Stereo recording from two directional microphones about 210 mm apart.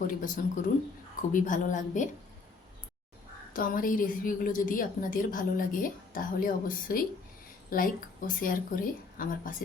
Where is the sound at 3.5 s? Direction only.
40° left (ahead or behind).